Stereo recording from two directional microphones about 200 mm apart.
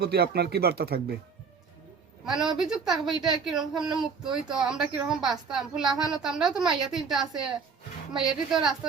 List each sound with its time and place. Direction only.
0.0 s speech: 55° right (ahead or behind)
2.2 s a man's voice: centre (ahead or behind)